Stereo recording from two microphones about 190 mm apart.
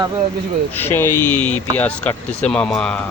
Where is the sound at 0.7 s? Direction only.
10° left (ahead or behind).